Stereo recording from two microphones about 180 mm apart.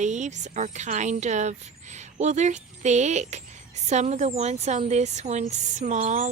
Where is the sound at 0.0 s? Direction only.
40° right (ahead or behind).